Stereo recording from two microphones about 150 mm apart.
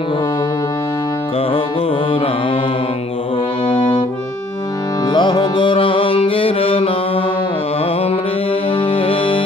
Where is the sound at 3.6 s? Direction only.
35° left (ahead or behind).